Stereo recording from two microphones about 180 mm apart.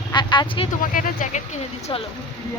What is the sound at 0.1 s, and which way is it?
Vehicle, 25° left (ahead or behind).